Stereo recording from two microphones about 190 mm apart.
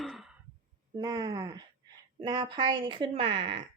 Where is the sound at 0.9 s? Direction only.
20° right (ahead or behind).